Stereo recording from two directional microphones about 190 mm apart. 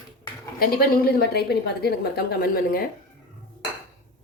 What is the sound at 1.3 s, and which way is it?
Speech, 60° left (ahead or behind).